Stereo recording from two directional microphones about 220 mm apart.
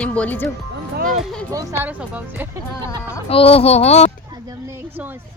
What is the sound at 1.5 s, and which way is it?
Speech, 15° right (ahead or behind).